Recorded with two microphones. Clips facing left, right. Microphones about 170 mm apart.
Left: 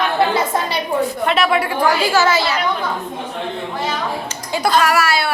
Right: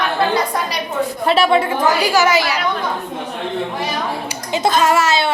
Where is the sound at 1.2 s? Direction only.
30° right (ahead or behind); by 2.6 s 15° right (ahead or behind).